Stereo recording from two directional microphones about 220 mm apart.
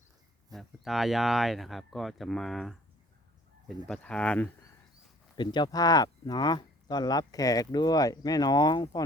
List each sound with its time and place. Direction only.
0.5 s speech: centre (ahead or behind)
3.8 s speech: 5° left (ahead or behind)
5.4 s speech: 20° left (ahead or behind)